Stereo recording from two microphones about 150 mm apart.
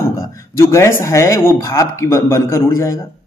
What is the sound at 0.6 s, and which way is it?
A man's voice, 20° left (ahead or behind).